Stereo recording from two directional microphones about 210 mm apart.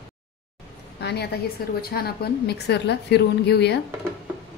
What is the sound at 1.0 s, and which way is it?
A woman's voice, 50° left (ahead or behind).